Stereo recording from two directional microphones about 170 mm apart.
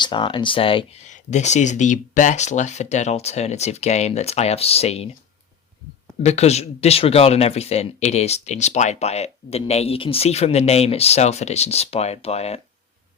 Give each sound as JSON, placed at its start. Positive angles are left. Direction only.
{"t": 0.0, "sound": "speech", "side_deg": 30}
{"t": 1.0, "sound": "speech", "side_deg": 45}
{"t": 6.2, "sound": "speech", "side_deg": 40}